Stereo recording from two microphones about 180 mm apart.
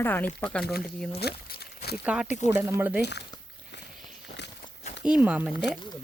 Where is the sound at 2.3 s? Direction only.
40° left (ahead or behind).